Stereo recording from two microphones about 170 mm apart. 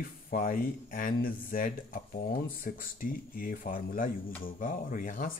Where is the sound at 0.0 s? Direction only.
55° left (ahead or behind).